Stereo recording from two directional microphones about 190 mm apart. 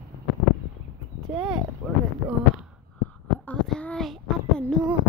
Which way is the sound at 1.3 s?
5° right (ahead or behind).